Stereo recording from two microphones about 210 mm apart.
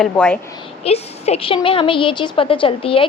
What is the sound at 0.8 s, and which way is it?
A woman's voice, 30° left (ahead or behind).